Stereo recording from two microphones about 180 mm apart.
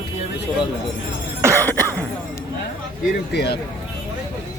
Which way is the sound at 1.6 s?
10° left (ahead or behind).